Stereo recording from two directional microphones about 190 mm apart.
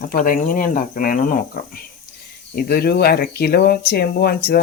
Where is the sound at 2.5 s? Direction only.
55° left (ahead or behind).